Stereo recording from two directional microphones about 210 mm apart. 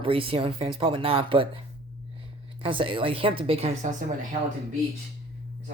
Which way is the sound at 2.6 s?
25° right (ahead or behind).